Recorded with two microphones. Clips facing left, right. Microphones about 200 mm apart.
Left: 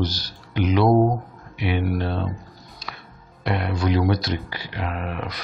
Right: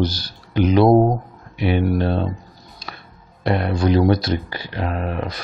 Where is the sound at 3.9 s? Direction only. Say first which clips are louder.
Right 5 dB; 35° right (ahead or behind).